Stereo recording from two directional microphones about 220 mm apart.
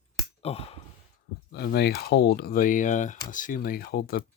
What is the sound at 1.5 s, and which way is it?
Speech, 45° left (ahead or behind).